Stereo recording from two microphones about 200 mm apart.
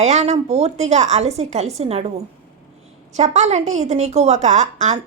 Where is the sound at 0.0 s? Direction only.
35° right (ahead or behind).